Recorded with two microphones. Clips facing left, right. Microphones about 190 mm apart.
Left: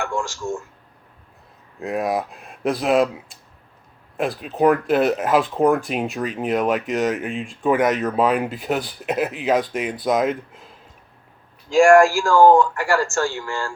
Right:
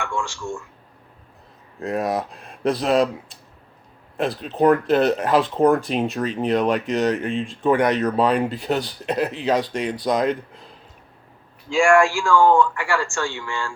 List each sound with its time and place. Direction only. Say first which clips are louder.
0.0 s speech: left 2 dB; 40° left (ahead or behind)
1.8 s speech: even; centre (ahead or behind)
4.2 s speech: even; 5° left (ahead or behind)
11.7 s speech: left 4 dB; 40° left (ahead or behind)